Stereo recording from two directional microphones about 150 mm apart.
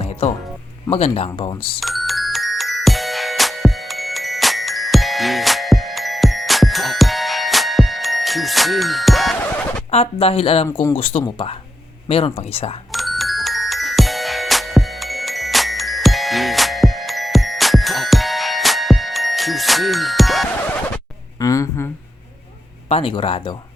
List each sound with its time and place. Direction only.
0.0 s music: 45° left (ahead or behind)
0.9 s speech: 40° left (ahead or behind)
1.8 s music: centre (ahead or behind)
9.9 s speech: 40° left (ahead or behind)
12.9 s music: centre (ahead or behind)
21.3 s a sound: 20° left (ahead or behind)
22.9 s speech: 35° left (ahead or behind)